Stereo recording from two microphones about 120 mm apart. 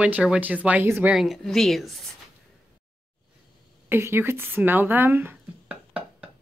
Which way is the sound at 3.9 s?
20° right (ahead or behind).